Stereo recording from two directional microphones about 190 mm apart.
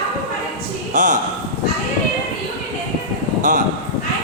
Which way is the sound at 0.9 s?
40° right (ahead or behind).